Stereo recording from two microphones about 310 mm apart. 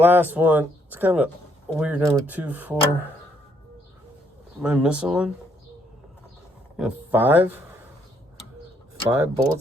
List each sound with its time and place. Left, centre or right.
0.0 s speech: centre
4.6 s speech: centre
6.7 s speech: centre
9.0 s speech: centre